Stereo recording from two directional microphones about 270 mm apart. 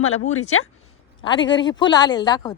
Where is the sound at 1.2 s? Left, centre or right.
Centre.